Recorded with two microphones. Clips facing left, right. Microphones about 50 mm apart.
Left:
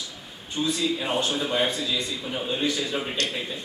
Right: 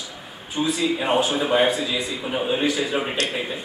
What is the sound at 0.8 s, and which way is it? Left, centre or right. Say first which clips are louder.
A man's voice: right 8 dB; right.